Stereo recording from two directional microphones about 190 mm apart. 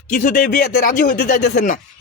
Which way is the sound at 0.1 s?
45° left (ahead or behind).